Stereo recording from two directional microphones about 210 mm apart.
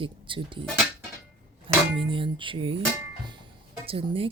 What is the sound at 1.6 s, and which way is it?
Speech, 25° right (ahead or behind).